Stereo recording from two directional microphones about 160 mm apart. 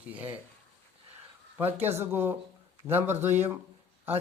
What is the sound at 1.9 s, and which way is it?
Speech, 15° right (ahead or behind).